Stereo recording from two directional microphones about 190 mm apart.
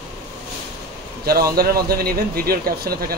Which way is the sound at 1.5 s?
55° right (ahead or behind).